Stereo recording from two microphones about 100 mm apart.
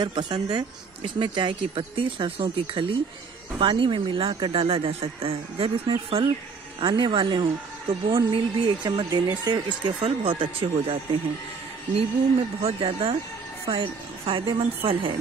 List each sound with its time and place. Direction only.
0.0 s speech: 45° right (ahead or behind); by 6.2 s 70° right (ahead or behind)
6.8 s a woman's voice: 55° right (ahead or behind)
10.0 s a woman's voice: 65° right (ahead or behind)
12.6 s speech: 70° right (ahead or behind)
13.7 s a woman's voice: 60° right (ahead or behind)